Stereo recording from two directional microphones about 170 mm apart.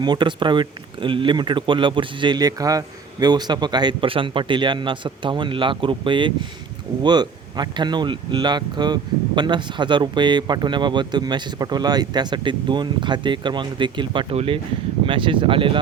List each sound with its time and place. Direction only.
0.0 s speech: 25° right (ahead or behind)